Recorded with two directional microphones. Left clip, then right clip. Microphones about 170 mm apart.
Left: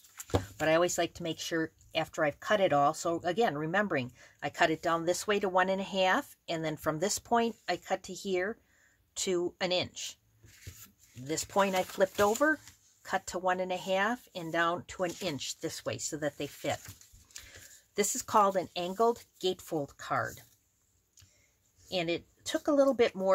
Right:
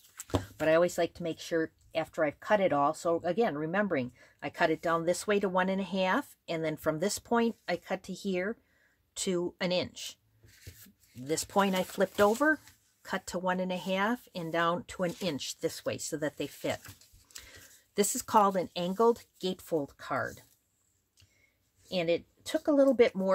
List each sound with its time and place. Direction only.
0.6 s speech: 25° right (ahead or behind)
11.2 s speech: 35° right (ahead or behind)
21.8 s speech: 30° right (ahead or behind)